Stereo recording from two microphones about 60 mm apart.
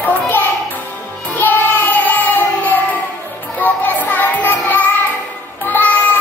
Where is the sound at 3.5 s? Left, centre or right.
Left.